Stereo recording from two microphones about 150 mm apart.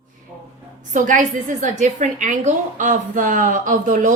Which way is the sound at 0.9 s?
60° right (ahead or behind).